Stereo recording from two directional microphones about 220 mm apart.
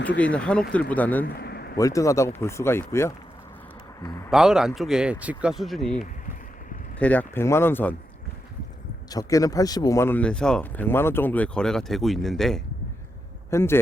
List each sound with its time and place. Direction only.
0.2 s speech: 5° left (ahead or behind)
1.2 s a sound: 45° left (ahead or behind)
1.8 s speech: 15° left (ahead or behind)
4.3 s speech: centre (ahead or behind)
7.0 s speech: 5° left (ahead or behind)
9.0 s speech: 15° left (ahead or behind)